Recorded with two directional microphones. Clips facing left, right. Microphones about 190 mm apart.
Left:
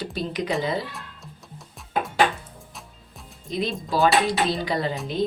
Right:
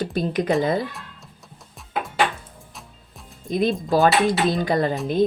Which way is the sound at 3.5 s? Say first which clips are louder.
Right 6 dB; 50° right (ahead or behind).